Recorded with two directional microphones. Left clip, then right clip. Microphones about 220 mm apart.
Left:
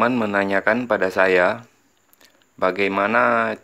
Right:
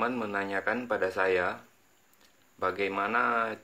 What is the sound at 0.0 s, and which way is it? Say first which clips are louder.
Speech: left 11 dB; 40° left (ahead or behind).